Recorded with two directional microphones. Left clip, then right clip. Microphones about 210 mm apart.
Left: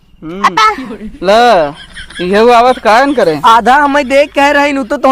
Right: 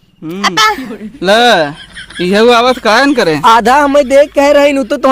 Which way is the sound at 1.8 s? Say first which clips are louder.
Even; centre (ahead or behind).